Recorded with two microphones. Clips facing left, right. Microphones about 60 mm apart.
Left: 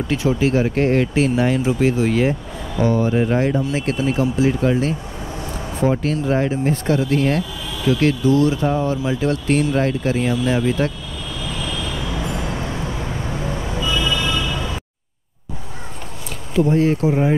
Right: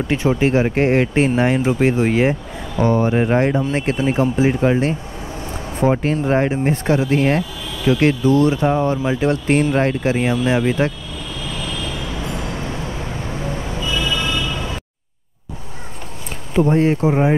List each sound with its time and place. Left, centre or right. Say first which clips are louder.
0.1 s speech: right 1 dB; right
11.6 s vehicle: left 1 dB; left
13.9 s a sound: right 1 dB; left
16.5 s speech: right 1 dB; right